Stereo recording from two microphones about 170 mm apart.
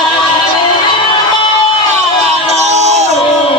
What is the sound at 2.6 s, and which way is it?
Crowd, 40° right (ahead or behind).